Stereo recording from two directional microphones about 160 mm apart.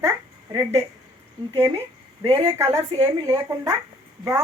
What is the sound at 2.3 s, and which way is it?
Speech, 20° right (ahead or behind).